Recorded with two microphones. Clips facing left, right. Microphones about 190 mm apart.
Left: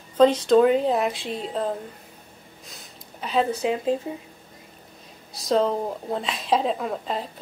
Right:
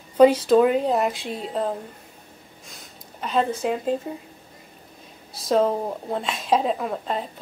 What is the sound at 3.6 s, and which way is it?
Speech, centre (ahead or behind).